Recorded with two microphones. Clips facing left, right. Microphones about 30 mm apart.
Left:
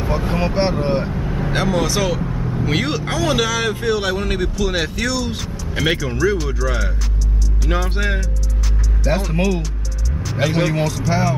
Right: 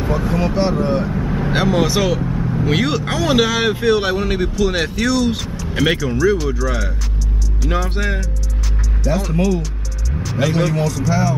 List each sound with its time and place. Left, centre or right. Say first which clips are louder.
0.2 s speech: even; left
1.1 s vehicle: right 3 dB; centre
2.8 s speech: right 3 dB; centre
3.2 s speech: right 3 dB; centre
10.3 s speech: right 1 dB; centre